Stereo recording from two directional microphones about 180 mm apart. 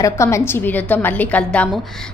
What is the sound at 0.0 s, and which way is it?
A woman's voice, 15° left (ahead or behind).